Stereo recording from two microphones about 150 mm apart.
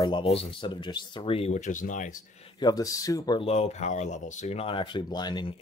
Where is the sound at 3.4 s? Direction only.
45° left (ahead or behind); by 5.6 s 30° left (ahead or behind).